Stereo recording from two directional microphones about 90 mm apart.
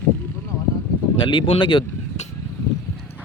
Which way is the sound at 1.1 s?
75° left (ahead or behind).